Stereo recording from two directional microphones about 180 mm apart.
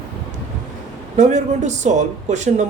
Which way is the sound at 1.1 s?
40° right (ahead or behind).